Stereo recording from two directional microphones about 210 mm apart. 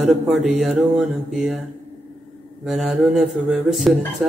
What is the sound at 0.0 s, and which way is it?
Speech, centre (ahead or behind).